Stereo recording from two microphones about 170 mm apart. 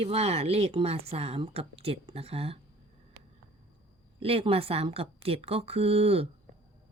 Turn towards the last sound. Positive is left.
turn(degrees=-35)  # may be behind; listen again after turning